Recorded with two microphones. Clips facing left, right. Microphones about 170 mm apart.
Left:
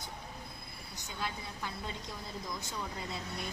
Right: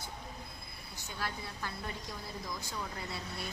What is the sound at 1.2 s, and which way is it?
A woman's voice, 20° left (ahead or behind).